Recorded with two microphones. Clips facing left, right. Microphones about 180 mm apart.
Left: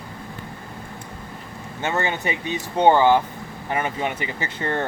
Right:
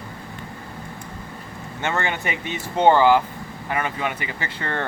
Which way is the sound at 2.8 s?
15° left (ahead or behind).